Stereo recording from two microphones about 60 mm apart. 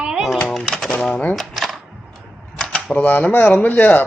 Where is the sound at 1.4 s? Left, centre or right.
Centre.